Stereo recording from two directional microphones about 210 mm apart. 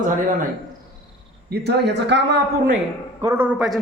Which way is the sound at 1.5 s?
50° right (ahead or behind).